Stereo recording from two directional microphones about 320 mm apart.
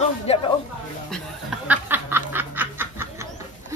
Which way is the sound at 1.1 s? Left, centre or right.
Centre.